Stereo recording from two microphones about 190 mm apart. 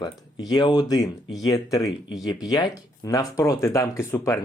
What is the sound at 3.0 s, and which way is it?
Speech, 15° left (ahead or behind).